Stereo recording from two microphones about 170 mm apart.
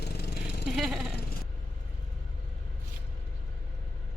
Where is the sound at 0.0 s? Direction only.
75° left (ahead or behind).